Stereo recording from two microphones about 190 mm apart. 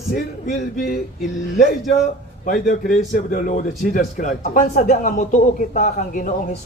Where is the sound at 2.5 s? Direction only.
45° left (ahead or behind).